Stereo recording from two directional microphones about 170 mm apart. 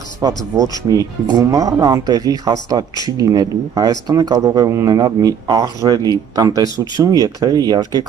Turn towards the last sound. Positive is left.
turn(degrees=-25)  # may be behind; listen again after turning